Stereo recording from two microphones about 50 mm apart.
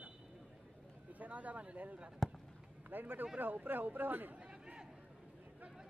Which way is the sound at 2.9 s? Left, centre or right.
Right.